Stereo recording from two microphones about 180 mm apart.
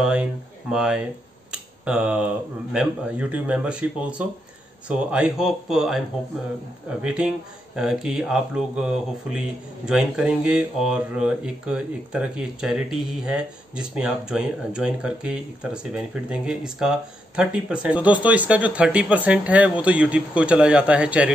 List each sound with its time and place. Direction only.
0.0 s speech: 5° right (ahead or behind)